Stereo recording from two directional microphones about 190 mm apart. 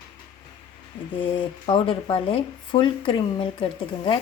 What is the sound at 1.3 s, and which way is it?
Cutlery, 25° left (ahead or behind).